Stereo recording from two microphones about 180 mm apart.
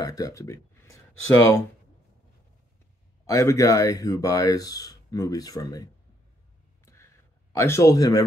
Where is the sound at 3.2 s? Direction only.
15° left (ahead or behind).